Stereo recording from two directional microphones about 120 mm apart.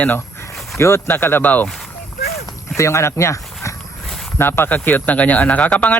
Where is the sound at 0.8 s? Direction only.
25° left (ahead or behind).